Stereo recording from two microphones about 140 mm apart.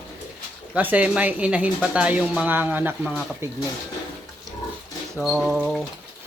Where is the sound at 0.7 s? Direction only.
10° right (ahead or behind).